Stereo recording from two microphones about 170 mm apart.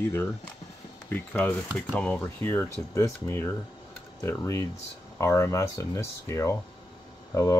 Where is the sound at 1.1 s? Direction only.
10° left (ahead or behind).